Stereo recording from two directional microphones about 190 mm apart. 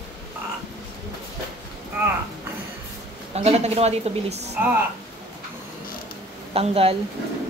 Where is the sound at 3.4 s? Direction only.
35° right (ahead or behind).